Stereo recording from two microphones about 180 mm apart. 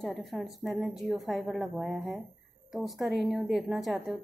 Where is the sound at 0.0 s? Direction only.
Centre (ahead or behind).